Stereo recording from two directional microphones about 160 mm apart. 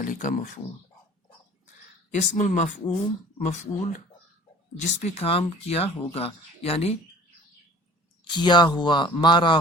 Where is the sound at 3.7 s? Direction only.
40° left (ahead or behind).